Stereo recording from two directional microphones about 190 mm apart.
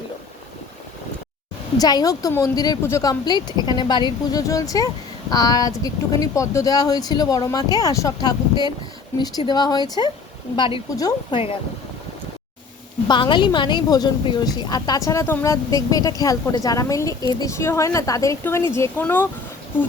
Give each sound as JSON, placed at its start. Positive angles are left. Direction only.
{"t": 1.8, "sound": "speech", "side_deg": 20}
{"t": 13.1, "sound": "a woman's voice", "side_deg": 25}